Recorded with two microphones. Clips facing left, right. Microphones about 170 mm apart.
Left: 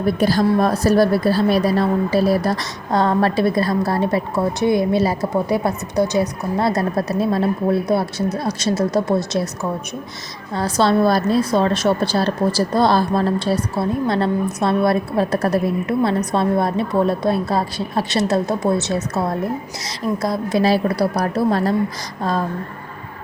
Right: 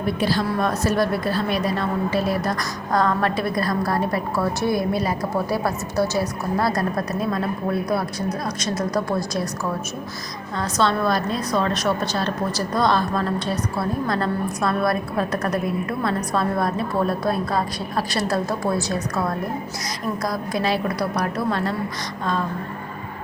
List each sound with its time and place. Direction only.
0.2 s a woman's voice: 45° left (ahead or behind); by 9.4 s 25° left (ahead or behind)
10.5 s a woman's voice: 35° left (ahead or behind)
20.2 s a woman's voice: 25° left (ahead or behind)